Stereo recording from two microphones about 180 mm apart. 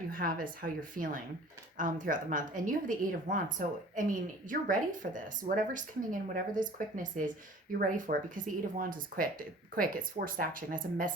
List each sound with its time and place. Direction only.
0.1 s a woman's voice: 50° right (ahead or behind)